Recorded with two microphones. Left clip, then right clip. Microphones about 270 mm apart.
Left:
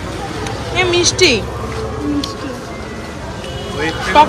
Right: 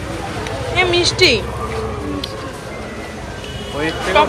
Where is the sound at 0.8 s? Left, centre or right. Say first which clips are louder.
Left 1 dB; centre.